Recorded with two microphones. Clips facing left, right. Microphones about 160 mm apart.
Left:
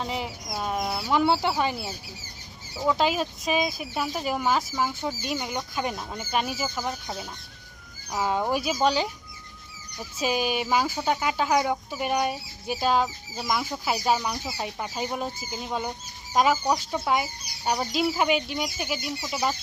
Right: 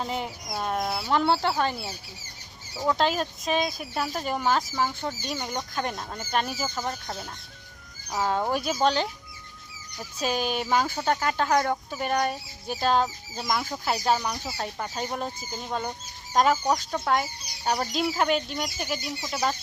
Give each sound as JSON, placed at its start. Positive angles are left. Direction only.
{"t": 0.0, "sound": "speech", "side_deg": 0}